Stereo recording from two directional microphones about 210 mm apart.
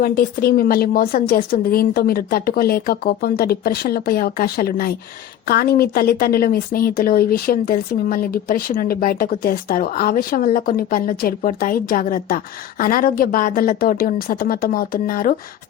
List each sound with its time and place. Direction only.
0.0 s a woman's voice: 45° left (ahead or behind)